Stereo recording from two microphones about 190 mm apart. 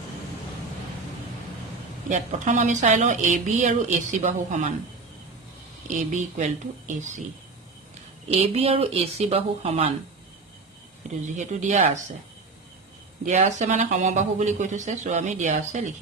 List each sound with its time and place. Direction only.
2.0 s speech: 40° right (ahead or behind)
5.9 s speech: 45° right (ahead or behind)
8.3 s speech: 30° right (ahead or behind)
11.3 s speech: 40° right (ahead or behind)
13.2 s speech: 40° right (ahead or behind)